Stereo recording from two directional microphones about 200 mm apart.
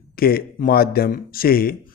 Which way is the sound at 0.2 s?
50° left (ahead or behind).